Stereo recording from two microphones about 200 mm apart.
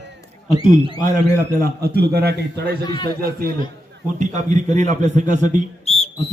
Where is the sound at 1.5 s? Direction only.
50° right (ahead or behind).